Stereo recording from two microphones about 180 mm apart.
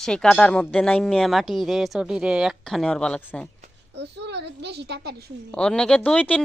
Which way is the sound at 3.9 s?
70° right (ahead or behind).